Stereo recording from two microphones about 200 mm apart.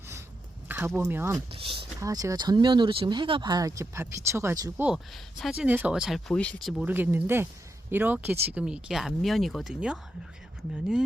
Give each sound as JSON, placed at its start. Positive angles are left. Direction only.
{"t": 0.7, "sound": "speech", "side_deg": -10}
{"t": 1.5, "sound": "speech", "side_deg": -25}
{"t": 4.9, "sound": "speech", "side_deg": 0}